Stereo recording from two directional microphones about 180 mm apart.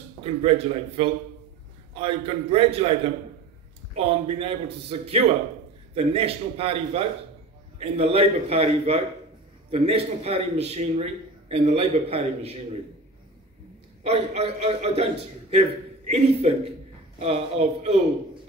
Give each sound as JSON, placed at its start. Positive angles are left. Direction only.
{"t": 0.2, "sound": "a man's voice", "side_deg": -35}
{"t": 14.0, "sound": "a man's voice", "side_deg": -35}
{"t": 16.1, "sound": "a man's voice", "side_deg": -35}